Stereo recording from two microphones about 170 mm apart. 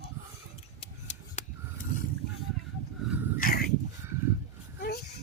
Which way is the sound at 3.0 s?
Centre (ahead or behind).